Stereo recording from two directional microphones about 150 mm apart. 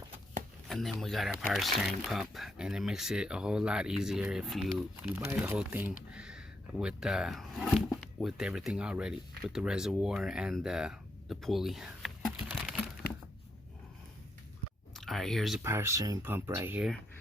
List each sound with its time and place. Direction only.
0.7 s speech: centre (ahead or behind)
14.9 s speech: centre (ahead or behind)
15.6 s speech: 20° right (ahead or behind)